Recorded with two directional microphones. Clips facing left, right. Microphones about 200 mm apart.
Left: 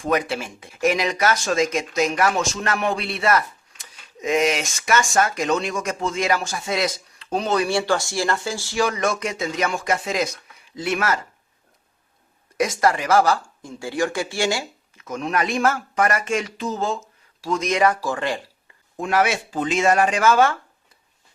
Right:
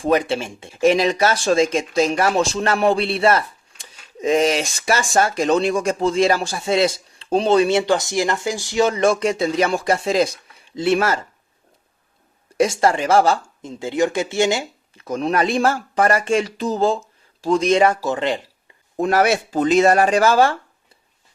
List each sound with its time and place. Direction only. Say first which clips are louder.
0.0 s speech: right 4 dB; 30° right (ahead or behind)
12.5 s speech: right 3 dB; 30° right (ahead or behind)
14.9 s speech: right 4 dB; 35° right (ahead or behind)
18.9 s speech: right 4 dB; 40° right (ahead or behind)